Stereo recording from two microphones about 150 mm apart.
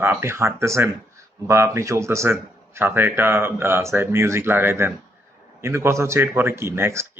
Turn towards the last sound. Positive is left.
turn(degrees=-15)  # may be behind; listen again after turning